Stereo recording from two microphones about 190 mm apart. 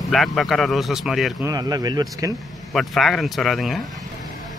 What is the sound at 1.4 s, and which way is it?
Speech, 20° right (ahead or behind).